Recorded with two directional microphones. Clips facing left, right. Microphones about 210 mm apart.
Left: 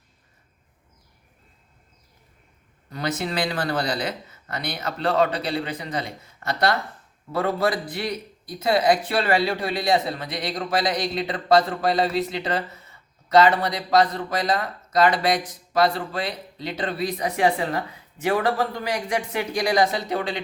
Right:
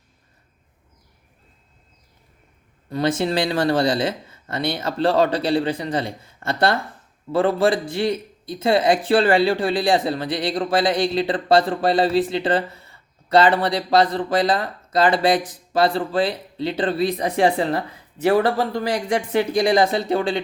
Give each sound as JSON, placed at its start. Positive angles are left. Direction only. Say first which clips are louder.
{"t": 2.9, "sound": "speech", "louder": "right 6 dB", "side_deg": -30}